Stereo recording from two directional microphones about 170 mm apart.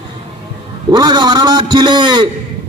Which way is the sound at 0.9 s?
25° right (ahead or behind).